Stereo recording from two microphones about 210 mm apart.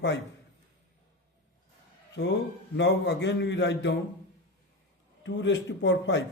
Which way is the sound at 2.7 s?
55° left (ahead or behind).